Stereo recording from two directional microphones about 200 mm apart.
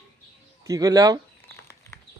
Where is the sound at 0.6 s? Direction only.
15° right (ahead or behind).